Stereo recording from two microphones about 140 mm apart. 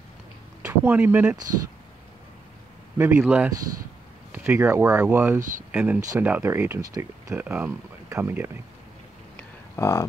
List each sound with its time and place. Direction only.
0.6 s speech: 15° right (ahead or behind)
3.0 s speech: 15° right (ahead or behind)
7.4 s speech: 10° right (ahead or behind)
9.8 s speech: 25° left (ahead or behind)